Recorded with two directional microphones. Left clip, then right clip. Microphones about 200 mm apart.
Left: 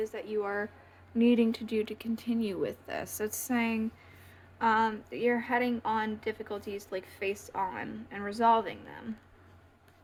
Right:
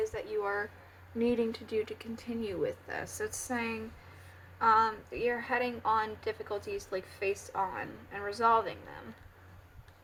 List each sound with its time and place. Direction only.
0.0 s a woman's voice: 40° left (ahead or behind)